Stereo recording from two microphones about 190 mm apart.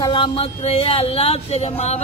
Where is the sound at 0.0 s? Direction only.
25° left (ahead or behind).